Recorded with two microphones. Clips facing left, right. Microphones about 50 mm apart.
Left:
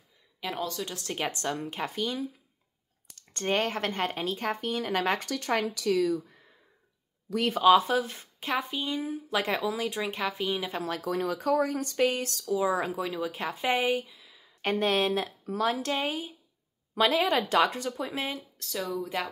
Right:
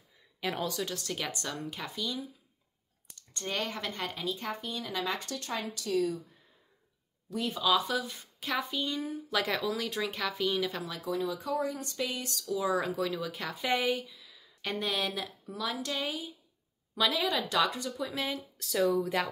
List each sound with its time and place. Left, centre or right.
1.0 s speech: left
3.2 s speech: left
4.4 s speech: left
5.3 s speech: left
7.3 s speech: left
7.6 s speech: left
8.4 s speech: left
9.4 s speech: centre
11.0 s speech: left
12.0 s speech: left
12.4 s speech: left
14.6 s speech: left
18.1 s speech: left
18.6 s speech: centre